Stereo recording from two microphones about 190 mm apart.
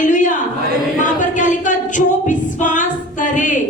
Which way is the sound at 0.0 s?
40° left (ahead or behind).